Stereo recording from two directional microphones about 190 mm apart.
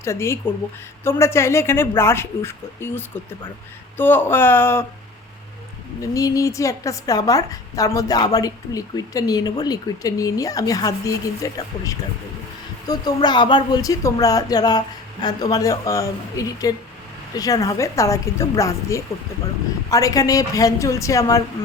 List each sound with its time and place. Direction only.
0.0 s a woman's voice: 15° left (ahead or behind)
6.0 s a woman's voice: 15° left (ahead or behind)